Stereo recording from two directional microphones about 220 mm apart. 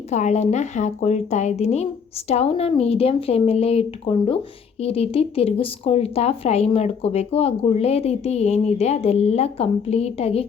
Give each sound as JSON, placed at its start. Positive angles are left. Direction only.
{"t": 0.1, "sound": "a woman's voice", "side_deg": 30}